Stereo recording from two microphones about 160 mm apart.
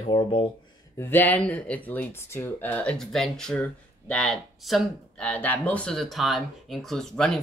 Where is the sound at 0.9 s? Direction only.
15° left (ahead or behind).